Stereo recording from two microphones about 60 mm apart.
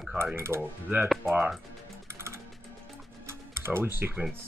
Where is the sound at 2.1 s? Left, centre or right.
Right.